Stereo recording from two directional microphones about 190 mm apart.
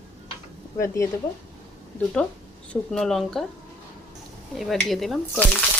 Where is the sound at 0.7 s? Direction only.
15° left (ahead or behind).